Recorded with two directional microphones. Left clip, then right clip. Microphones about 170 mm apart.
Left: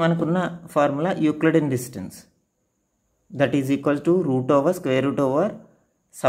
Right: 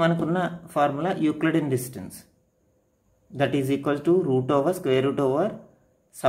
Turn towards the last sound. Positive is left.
turn(degrees=30)  # may be behind; listen again after turning